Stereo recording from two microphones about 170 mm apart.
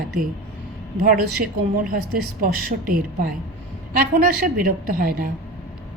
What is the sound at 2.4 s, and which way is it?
A woman's voice, 55° right (ahead or behind).